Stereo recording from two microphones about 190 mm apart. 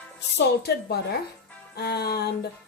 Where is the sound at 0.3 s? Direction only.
60° left (ahead or behind).